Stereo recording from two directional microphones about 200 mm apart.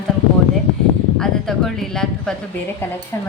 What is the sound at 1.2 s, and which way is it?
A woman's voice, centre (ahead or behind).